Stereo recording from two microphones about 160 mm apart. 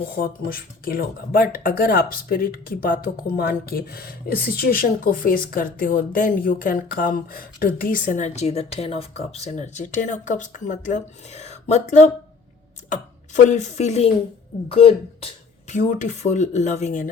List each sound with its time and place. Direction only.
0.4 s speech: 70° left (ahead or behind); by 15.3 s 35° left (ahead or behind)
15.7 s speech: 55° left (ahead or behind)